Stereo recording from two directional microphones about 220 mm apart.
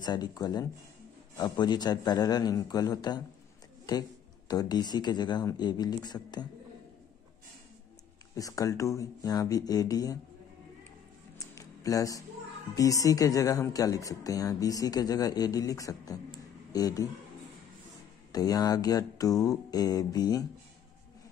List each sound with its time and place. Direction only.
0.0 s speech: 20° left (ahead or behind)
4.5 s speech: 15° left (ahead or behind)
8.4 s speech: 15° left (ahead or behind)
11.3 s music: 15° left (ahead or behind)
12.7 s speech: 15° left (ahead or behind)
18.3 s speech: 15° left (ahead or behind)